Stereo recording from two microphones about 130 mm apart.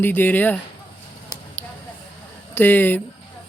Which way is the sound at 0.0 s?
15° left (ahead or behind).